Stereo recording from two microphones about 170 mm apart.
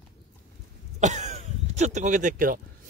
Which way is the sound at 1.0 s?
45° right (ahead or behind).